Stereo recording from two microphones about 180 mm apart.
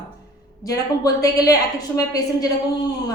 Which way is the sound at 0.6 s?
20° left (ahead or behind).